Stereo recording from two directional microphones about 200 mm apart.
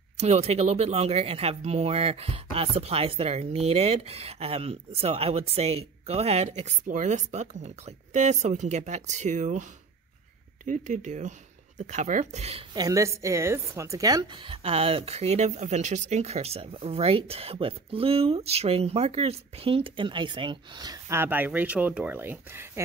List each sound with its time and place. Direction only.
0.2 s speech: 35° right (ahead or behind)
12.7 s a woman's voice: 15° right (ahead or behind)